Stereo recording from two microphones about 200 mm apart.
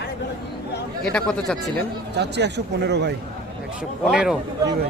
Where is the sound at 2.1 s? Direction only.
60° right (ahead or behind).